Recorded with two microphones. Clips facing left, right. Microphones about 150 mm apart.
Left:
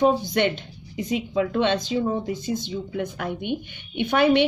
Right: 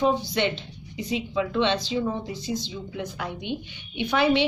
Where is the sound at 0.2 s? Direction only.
50° left (ahead or behind).